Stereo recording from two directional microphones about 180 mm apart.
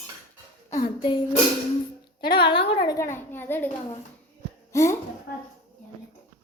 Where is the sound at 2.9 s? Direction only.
15° left (ahead or behind).